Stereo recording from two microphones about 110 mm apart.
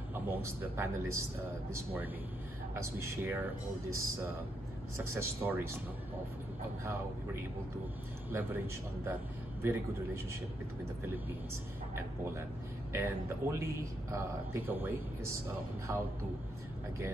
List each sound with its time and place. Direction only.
0.1 s speech: 20° right (ahead or behind)
2.7 s speech: 25° right (ahead or behind)
4.9 s speech: 25° right (ahead or behind)
8.3 s speech: 20° right (ahead or behind)
12.9 s speech: 25° right (ahead or behind)